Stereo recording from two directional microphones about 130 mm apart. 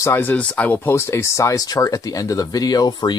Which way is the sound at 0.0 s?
15° left (ahead or behind).